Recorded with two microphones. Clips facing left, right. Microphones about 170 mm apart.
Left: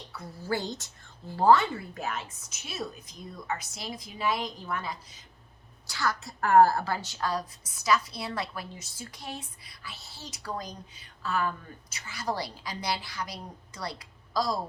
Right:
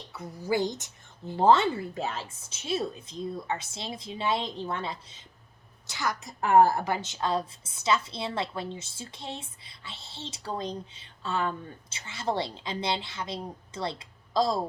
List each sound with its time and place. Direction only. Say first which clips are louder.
0.1 s a woman's voice: right 3 dB; 20° right (ahead or behind)